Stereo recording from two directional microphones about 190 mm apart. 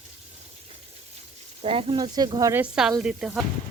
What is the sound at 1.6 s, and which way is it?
Speech, 30° right (ahead or behind).